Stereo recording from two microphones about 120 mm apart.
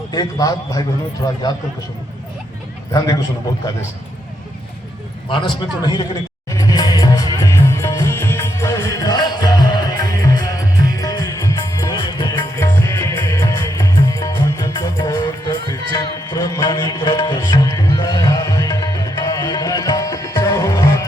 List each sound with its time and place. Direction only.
0.1 s a man's voice: 35° left (ahead or behind)
2.9 s a man's voice: 30° left (ahead or behind)
5.3 s a man's voice: 40° left (ahead or behind)
6.5 s music: 30° left (ahead or behind)
12.5 s music: 20° left (ahead or behind)